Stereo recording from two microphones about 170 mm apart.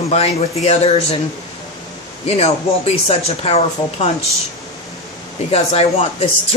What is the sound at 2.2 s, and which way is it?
A woman's voice, 35° left (ahead or behind).